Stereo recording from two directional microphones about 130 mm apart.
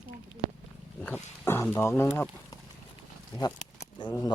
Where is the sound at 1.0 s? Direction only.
20° left (ahead or behind).